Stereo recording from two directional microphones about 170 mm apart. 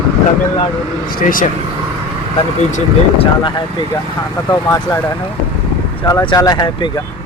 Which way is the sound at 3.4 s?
30° left (ahead or behind).